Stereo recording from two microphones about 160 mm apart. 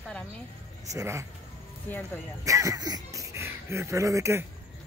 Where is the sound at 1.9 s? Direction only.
10° left (ahead or behind).